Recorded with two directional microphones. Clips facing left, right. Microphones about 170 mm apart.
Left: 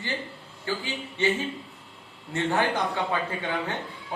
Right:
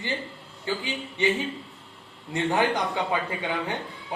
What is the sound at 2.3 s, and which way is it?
Speech, 15° right (ahead or behind).